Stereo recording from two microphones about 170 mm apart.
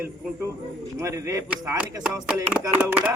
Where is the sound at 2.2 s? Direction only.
5° right (ahead or behind).